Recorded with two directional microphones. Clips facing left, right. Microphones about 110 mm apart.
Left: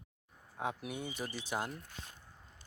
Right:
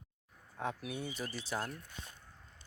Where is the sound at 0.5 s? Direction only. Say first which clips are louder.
Even; 15° left (ahead or behind).